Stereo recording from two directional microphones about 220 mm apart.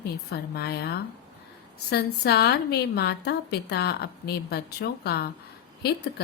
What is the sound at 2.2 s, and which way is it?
A woman's voice, 50° left (ahead or behind).